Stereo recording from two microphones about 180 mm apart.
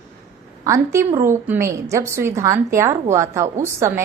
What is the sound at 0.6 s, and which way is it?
A woman's voice, 15° right (ahead or behind).